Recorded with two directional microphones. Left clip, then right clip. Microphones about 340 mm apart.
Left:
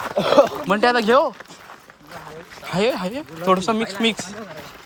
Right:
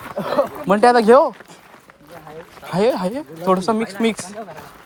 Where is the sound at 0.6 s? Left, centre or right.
Centre.